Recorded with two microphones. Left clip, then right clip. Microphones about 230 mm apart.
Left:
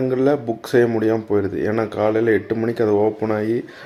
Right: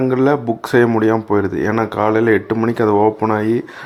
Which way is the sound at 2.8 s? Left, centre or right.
Right.